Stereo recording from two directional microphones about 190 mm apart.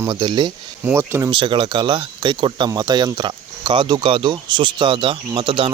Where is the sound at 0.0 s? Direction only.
25° right (ahead or behind).